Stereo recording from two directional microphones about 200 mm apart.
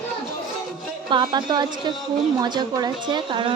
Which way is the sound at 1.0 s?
25° right (ahead or behind).